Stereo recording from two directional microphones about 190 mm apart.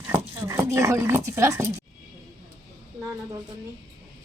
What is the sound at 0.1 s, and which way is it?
Speech, 15° right (ahead or behind).